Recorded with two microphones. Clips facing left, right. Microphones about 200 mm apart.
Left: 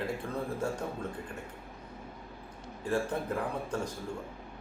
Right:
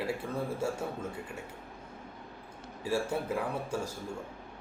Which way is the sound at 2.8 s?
10° right (ahead or behind).